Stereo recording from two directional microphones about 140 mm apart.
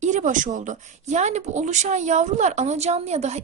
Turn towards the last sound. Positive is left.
turn(degrees=-50)  # may be behind; listen again after turning